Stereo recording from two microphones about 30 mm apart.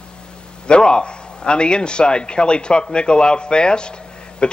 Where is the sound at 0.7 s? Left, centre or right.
Left.